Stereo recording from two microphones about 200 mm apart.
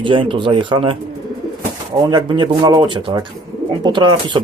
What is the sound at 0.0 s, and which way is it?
Speech, 25° right (ahead or behind).